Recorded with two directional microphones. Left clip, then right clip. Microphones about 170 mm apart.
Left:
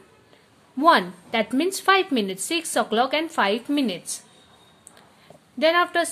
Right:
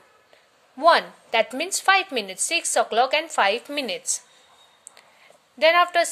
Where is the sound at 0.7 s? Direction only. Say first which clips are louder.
Even; 15° right (ahead or behind).